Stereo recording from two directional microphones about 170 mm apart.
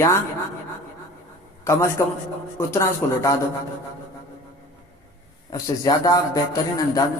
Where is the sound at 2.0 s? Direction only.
15° left (ahead or behind).